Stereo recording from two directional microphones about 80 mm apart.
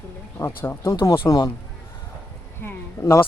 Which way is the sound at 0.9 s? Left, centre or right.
Left.